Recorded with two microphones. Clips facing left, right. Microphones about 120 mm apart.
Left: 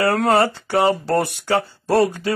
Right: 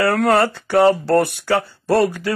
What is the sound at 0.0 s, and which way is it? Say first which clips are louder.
Speech: right 1 dB; 20° left (ahead or behind).